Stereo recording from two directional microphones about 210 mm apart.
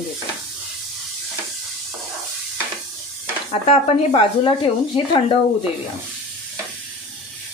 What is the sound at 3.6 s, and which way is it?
Speech, 30° left (ahead or behind).